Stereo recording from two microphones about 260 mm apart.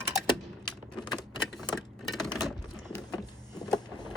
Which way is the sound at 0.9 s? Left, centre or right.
Centre.